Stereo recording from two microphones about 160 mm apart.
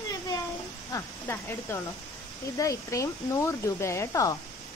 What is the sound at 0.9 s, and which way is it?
Speech, 15° left (ahead or behind).